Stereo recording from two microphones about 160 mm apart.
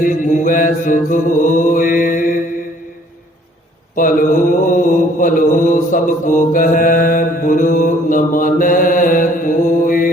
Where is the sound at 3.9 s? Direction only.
55° left (ahead or behind).